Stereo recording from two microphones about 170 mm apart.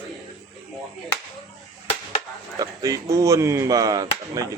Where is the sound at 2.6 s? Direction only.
20° right (ahead or behind).